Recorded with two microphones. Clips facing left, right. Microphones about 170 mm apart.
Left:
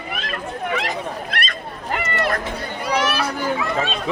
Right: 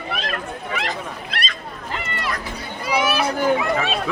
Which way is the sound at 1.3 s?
50° left (ahead or behind).